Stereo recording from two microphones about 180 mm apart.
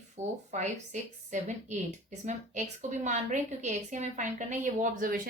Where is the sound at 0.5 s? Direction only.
40° right (ahead or behind).